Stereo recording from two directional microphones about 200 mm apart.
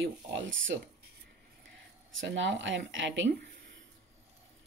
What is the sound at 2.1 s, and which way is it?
A woman's voice, 65° right (ahead or behind).